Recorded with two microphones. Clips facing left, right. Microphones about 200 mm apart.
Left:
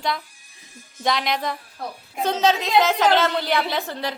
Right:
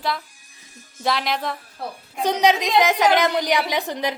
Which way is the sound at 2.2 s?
15° right (ahead or behind).